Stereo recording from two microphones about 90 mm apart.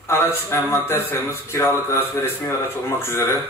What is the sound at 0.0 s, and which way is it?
A man's voice, 30° left (ahead or behind).